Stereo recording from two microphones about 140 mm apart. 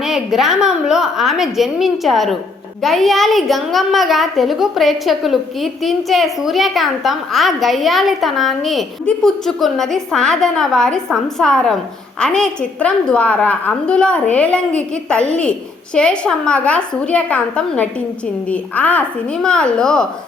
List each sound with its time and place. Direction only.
0.0 s a woman's voice: 5° right (ahead or behind)